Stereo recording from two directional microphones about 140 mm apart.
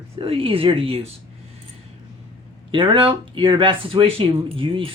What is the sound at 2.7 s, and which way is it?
Speech, 35° right (ahead or behind).